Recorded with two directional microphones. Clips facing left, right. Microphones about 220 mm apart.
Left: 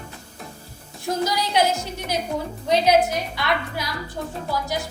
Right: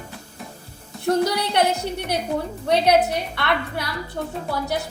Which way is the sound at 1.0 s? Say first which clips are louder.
Right 4 dB; 65° right (ahead or behind).